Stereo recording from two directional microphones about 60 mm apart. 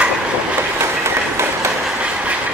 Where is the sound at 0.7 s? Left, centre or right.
Right.